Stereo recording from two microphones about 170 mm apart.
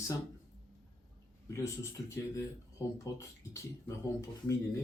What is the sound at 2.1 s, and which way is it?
Speech, 15° left (ahead or behind).